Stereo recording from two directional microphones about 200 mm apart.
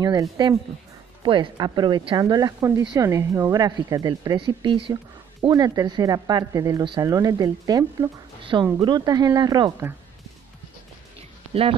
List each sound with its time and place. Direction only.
0.0 s speech: 20° right (ahead or behind)